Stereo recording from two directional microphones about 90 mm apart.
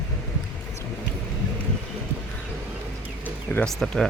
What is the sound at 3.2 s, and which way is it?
Music, 20° left (ahead or behind).